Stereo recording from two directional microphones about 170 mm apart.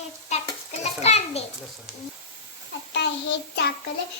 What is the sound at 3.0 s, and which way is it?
Child singing, 90° left.